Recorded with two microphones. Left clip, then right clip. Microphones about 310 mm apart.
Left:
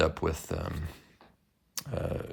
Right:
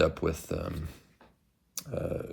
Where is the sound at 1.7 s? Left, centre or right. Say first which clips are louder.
Right 1 dB; left.